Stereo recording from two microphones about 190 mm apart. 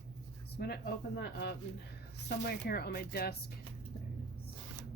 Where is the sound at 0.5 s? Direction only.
55° left (ahead or behind).